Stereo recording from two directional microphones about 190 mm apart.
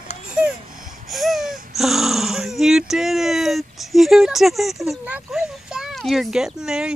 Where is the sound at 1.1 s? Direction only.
Centre (ahead or behind).